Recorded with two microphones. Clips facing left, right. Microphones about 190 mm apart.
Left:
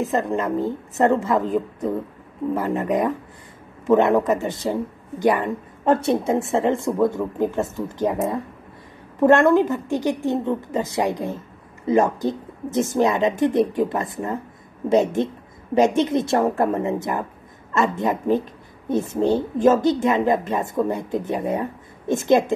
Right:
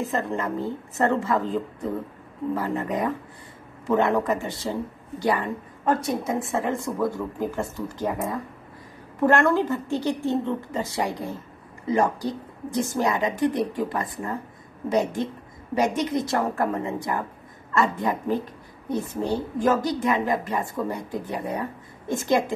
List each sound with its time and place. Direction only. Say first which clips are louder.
0.1 s a woman's voice: left 5 dB; 20° left (ahead or behind)